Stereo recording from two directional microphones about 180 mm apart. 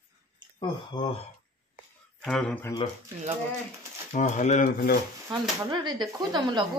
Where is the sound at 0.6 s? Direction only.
25° left (ahead or behind).